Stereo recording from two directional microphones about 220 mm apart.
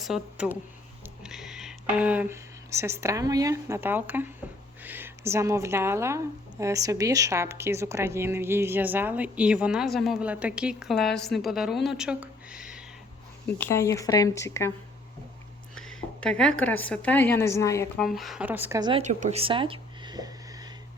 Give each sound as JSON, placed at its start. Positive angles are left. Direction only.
{"t": 0.0, "sound": "speech", "side_deg": -5}
{"t": 13.6, "sound": "speech", "side_deg": 10}
{"t": 16.2, "sound": "a woman's voice", "side_deg": 5}
{"t": 18.0, "sound": "speech", "side_deg": 0}